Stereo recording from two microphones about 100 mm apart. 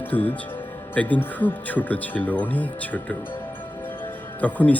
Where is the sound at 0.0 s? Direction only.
15° left (ahead or behind).